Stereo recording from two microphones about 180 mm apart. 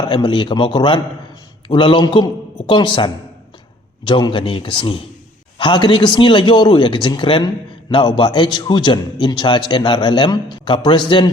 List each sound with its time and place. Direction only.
0.0 s a man's voice: 25° left (ahead or behind)